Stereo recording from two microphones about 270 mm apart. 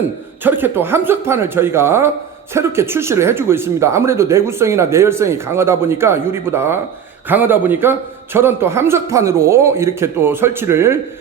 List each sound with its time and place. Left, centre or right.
0.4 s speech: centre